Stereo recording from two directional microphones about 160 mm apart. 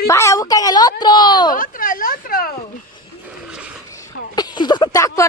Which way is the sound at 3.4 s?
5° right (ahead or behind).